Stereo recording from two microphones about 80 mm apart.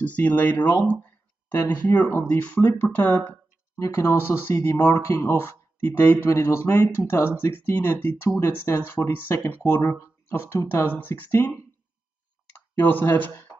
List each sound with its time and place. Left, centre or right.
0.0 s speech: centre
3.7 s speech: left
12.7 s speech: left